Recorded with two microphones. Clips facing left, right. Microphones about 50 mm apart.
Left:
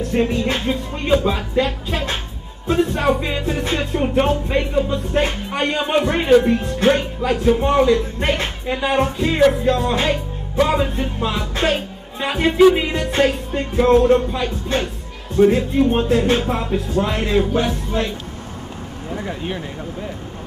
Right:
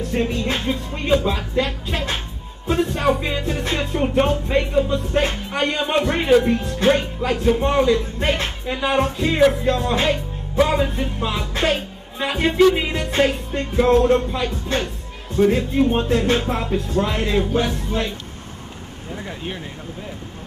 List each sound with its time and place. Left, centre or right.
0.0 s music: centre
19.0 s speech: centre